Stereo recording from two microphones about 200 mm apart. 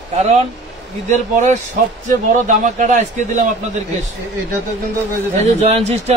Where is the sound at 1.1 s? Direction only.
35° right (ahead or behind).